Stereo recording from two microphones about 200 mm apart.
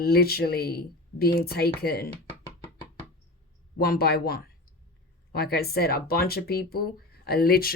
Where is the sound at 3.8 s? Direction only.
50° left (ahead or behind).